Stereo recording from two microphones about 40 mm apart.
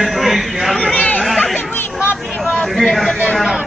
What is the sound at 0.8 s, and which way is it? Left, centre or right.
Speech, left.